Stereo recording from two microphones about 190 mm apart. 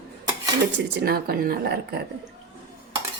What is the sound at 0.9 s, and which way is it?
Speech, 55° right (ahead or behind).